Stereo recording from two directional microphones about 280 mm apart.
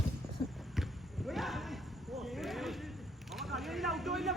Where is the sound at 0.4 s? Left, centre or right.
Centre.